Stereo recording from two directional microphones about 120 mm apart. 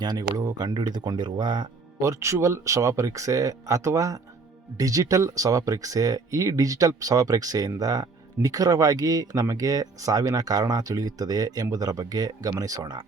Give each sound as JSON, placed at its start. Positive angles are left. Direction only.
{"t": 0.0, "sound": "speech", "side_deg": -35}
{"t": 2.0, "sound": "speech", "side_deg": -25}